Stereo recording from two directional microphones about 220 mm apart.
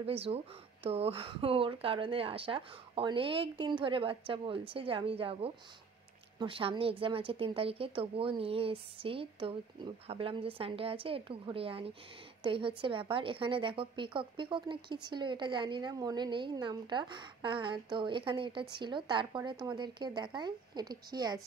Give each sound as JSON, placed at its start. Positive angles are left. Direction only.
{"t": 0.0, "sound": "a woman's voice", "side_deg": -25}